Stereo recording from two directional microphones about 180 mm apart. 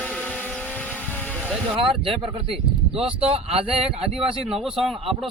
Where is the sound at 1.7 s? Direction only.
30° right (ahead or behind).